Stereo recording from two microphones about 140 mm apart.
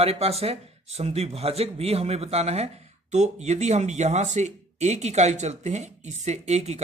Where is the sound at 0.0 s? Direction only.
45° right (ahead or behind).